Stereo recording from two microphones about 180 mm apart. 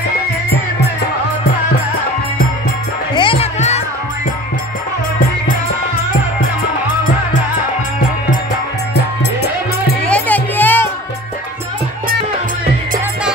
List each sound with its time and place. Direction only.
3.2 s music: 30° left (ahead or behind)
10.0 s music: 10° left (ahead or behind)